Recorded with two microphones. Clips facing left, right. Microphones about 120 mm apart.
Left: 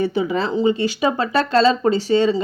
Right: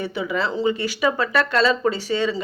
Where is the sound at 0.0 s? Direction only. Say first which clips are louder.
Left 5 dB; 30° left (ahead or behind).